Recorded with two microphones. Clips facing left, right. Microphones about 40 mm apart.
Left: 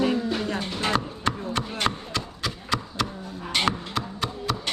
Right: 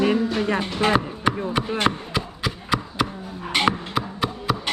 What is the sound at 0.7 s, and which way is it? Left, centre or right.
Chopping, centre.